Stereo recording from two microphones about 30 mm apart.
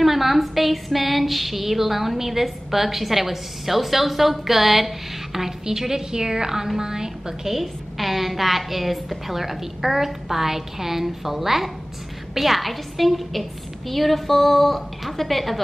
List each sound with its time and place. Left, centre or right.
0.0 s a woman's voice: centre
7.4 s a woman's voice: centre